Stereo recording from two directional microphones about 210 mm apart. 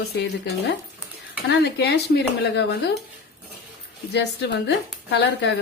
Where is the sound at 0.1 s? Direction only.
50° left (ahead or behind).